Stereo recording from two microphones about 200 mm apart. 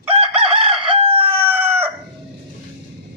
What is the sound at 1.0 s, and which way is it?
Chicken, 30° right (ahead or behind).